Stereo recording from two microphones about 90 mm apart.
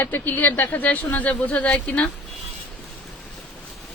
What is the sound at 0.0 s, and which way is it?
Speech, 20° left (ahead or behind).